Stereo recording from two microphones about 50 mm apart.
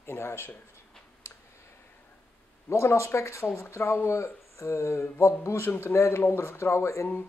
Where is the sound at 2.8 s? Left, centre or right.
Left.